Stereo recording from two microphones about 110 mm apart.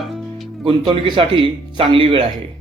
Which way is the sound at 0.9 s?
45° right (ahead or behind).